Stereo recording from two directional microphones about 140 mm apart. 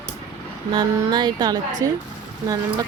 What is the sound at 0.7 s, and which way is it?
Speech, 30° right (ahead or behind).